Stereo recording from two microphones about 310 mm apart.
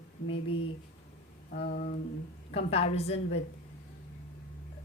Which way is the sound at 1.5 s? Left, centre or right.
Left.